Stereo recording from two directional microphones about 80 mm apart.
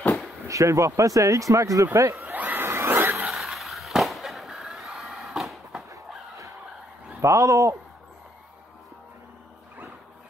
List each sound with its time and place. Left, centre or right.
0.5 s speech: right
2.2 s a sound: right
3.3 s fireworks: centre
7.2 s speech: right